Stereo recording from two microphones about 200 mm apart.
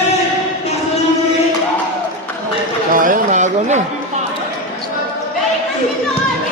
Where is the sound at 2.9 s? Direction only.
40° right (ahead or behind).